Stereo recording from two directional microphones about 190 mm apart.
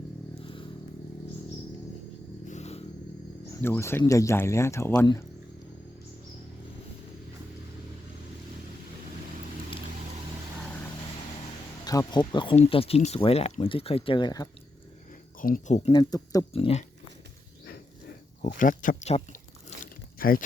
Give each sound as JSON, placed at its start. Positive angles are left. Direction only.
{"t": 2.5, "sound": "vehicle", "side_deg": 35}
{"t": 3.5, "sound": "speech", "side_deg": 15}
{"t": 11.9, "sound": "speech", "side_deg": 20}
{"t": 15.4, "sound": "speech", "side_deg": 45}
{"t": 15.9, "sound": "speech", "side_deg": 20}
{"t": 16.5, "sound": "speech", "side_deg": 30}
{"t": 18.4, "sound": "speech", "side_deg": 45}
{"t": 19.8, "sound": "biting", "side_deg": 50}